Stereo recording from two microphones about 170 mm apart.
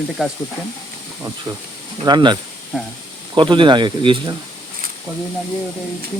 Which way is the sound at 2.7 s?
Centre (ahead or behind).